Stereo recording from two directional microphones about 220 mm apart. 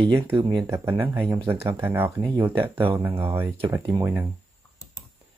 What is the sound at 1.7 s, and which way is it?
Speech, 10° right (ahead or behind).